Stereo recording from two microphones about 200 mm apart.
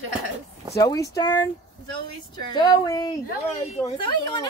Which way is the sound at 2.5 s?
20° left (ahead or behind).